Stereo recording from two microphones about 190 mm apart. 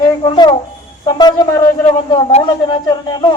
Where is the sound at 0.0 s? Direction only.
25° left (ahead or behind).